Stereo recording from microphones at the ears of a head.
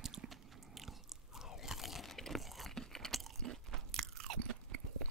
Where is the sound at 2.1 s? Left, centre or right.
Centre.